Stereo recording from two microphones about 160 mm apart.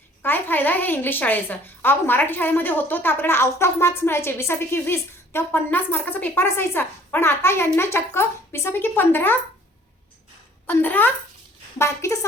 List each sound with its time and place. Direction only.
0.2 s a woman's voice: 10° left (ahead or behind)
10.7 s a woman's voice: 10° left (ahead or behind)